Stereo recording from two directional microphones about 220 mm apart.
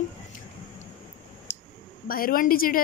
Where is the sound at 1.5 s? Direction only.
50° left (ahead or behind).